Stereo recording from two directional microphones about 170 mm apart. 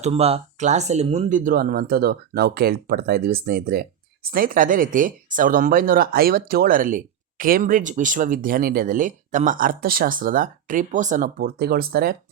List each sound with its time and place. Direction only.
0.0 s speech: 35° right (ahead or behind); by 12.1 s 60° right (ahead or behind)